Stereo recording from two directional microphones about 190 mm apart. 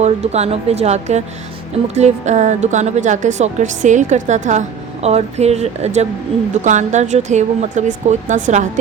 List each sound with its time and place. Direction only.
0.0 s a woman's voice: 35° right (ahead or behind)